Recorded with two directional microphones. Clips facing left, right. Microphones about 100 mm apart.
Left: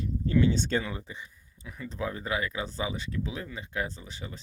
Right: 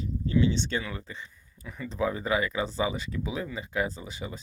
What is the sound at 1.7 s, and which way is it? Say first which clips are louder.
Speech: right 5 dB; centre (ahead or behind).